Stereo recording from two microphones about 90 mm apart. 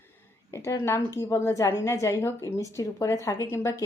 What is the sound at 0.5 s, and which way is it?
A woman's voice, 35° left (ahead or behind).